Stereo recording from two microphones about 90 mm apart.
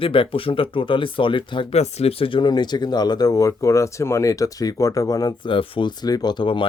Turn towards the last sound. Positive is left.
turn(degrees=65)  # may be behind; listen again after turning